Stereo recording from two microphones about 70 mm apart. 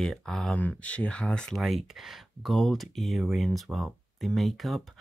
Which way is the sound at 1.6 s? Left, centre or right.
Centre.